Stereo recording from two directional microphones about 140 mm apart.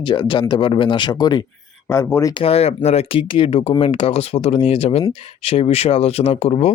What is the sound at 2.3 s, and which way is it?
Speech, 45° left (ahead or behind).